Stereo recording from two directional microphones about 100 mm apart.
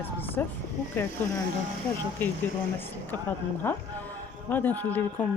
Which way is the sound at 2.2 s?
20° left (ahead or behind).